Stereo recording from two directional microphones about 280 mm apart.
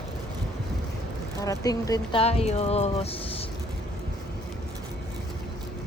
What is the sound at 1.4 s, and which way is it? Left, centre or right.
Speech, centre.